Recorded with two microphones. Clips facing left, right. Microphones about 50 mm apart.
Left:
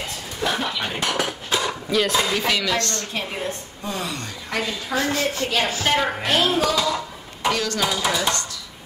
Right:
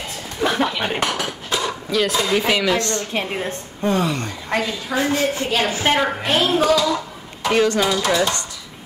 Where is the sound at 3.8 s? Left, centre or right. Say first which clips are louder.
Right 9 dB; right.